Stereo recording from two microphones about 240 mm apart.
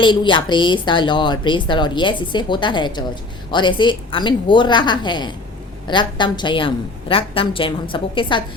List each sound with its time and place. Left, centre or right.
0.0 s speech: centre